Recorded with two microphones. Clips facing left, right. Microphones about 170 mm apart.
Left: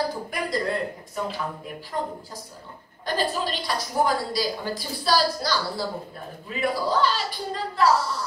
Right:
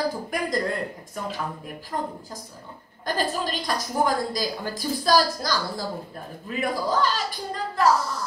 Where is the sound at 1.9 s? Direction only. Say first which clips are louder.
Even; 45° right (ahead or behind).